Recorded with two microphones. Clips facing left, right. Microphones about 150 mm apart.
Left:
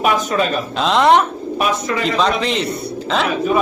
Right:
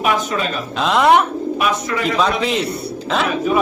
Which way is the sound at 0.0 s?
45° left (ahead or behind).